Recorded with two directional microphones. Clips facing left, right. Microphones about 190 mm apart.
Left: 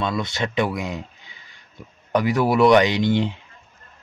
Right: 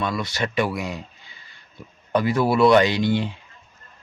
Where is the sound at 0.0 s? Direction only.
20° left (ahead or behind).